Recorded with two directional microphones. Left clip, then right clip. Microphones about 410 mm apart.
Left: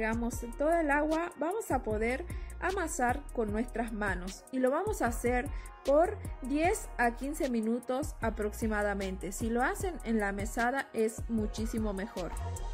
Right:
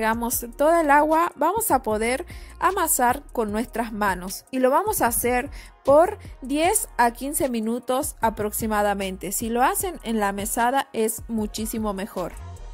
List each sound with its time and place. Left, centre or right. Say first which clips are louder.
0.0 s a woman's voice: right 10 dB; right